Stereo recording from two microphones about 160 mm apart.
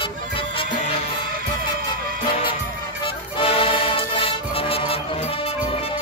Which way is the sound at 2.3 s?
35° left (ahead or behind).